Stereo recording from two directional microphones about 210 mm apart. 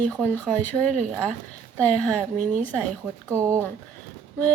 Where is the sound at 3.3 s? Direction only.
15° right (ahead or behind).